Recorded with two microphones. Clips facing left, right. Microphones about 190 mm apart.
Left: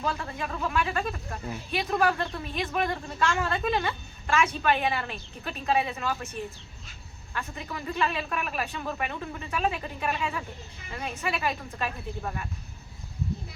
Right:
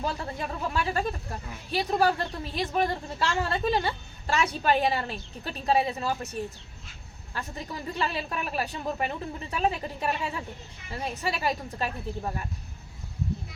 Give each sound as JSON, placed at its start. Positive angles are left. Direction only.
{"t": 0.0, "sound": "a woman's voice", "side_deg": -35}
{"t": 7.3, "sound": "a woman's voice", "side_deg": -35}